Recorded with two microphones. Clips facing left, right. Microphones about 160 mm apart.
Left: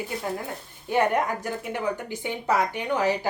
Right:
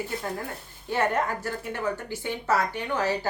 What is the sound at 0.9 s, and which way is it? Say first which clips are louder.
A woman's voice: left 3 dB; 15° left (ahead or behind).